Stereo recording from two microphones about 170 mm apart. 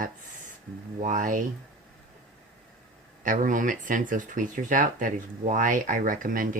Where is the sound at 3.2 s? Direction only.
50° right (ahead or behind).